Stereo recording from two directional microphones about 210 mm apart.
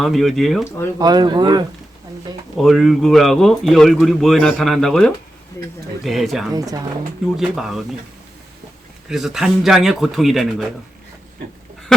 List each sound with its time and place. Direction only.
0.0 s a man's voice: centre (ahead or behind)
0.9 s speech: 20° right (ahead or behind)
2.6 s a man's voice: centre (ahead or behind)
6.5 s speech: 15° right (ahead or behind)
7.3 s a man's voice: centre (ahead or behind)
9.0 s a man's voice: centre (ahead or behind)
11.9 s duck: centre (ahead or behind)